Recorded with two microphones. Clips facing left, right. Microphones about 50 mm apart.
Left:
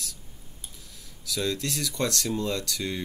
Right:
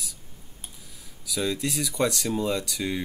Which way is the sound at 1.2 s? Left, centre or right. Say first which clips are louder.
Right 1 dB; centre.